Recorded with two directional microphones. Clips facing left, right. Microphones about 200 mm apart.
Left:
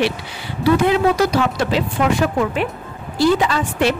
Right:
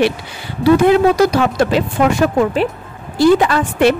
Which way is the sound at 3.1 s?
55° right (ahead or behind).